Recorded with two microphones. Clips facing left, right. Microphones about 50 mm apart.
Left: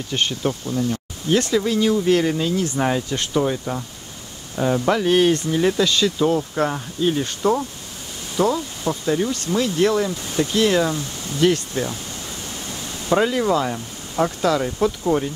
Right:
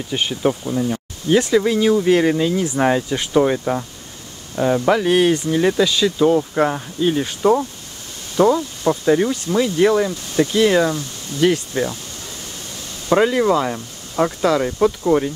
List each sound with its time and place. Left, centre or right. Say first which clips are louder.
0.1 s speech: right 3 dB; centre; by 3.8 s right
4.6 s speech: right 3 dB; centre
9.0 s speech: right 5 dB; right
9.3 s speech: right 3 dB; centre
13.1 s speech: right 3 dB; centre